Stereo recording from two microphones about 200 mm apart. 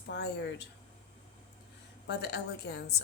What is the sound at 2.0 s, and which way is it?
Speech, 60° left (ahead or behind).